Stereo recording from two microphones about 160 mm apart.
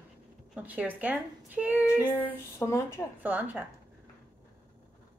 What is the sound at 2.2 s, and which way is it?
Speech, 15° left (ahead or behind).